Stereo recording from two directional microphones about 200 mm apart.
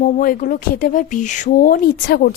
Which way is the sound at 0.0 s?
45° left (ahead or behind).